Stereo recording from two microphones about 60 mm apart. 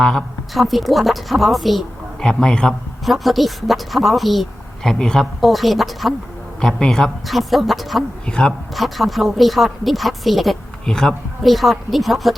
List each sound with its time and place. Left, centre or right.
0.0 s a woman's voice: centre
2.2 s speech: centre
3.0 s a woman's voice: centre
5.4 s a woman's voice: centre
6.6 s a woman's voice: centre
8.2 s speech: centre
8.7 s a woman's voice: centre